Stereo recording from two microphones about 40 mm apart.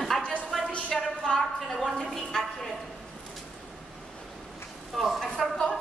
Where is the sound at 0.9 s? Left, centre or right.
Centre.